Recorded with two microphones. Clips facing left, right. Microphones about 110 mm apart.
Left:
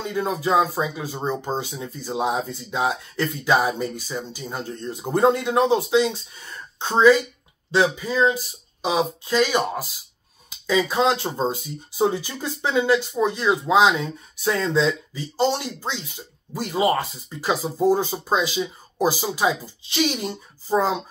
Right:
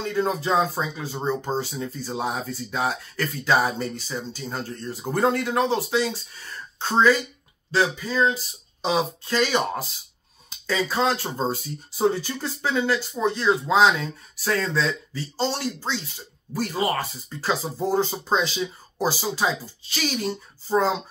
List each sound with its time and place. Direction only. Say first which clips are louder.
0.0 s speech: even; 10° left (ahead or behind)